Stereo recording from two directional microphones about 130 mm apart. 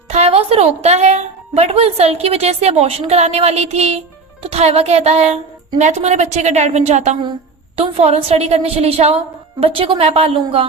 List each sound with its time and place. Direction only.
0.1 s a woman's voice: 55° right (ahead or behind)
7.8 s a woman's voice: 50° right (ahead or behind)